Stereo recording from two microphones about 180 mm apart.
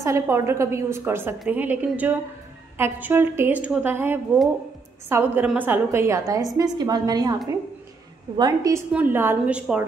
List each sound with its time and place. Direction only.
0.0 s a woman's voice: 15° right (ahead or behind)
8.4 s a woman's voice: 20° right (ahead or behind)